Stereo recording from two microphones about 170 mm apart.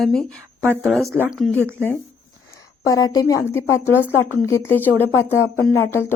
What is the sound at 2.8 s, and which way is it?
Speech, 20° left (ahead or behind).